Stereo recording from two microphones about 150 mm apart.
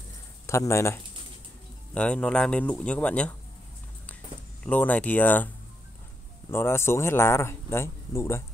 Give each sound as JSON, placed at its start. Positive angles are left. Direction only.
{"t": 0.5, "sound": "speech", "side_deg": 20}
{"t": 2.0, "sound": "speech", "side_deg": 5}
{"t": 4.6, "sound": "speech", "side_deg": 10}
{"t": 6.5, "sound": "speech", "side_deg": 15}